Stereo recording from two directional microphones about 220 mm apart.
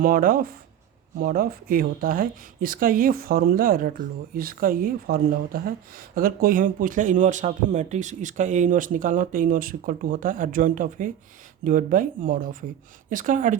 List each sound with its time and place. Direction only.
0.0 s speech: 40° right (ahead or behind)